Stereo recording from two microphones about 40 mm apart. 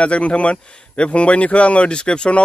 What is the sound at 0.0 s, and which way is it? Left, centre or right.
Speech, left.